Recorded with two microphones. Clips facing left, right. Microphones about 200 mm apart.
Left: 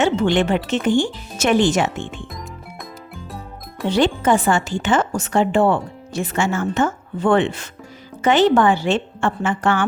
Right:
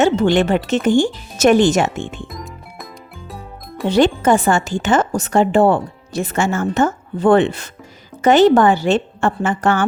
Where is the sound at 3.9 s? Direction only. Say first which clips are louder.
Right 3 dB; 45° right (ahead or behind).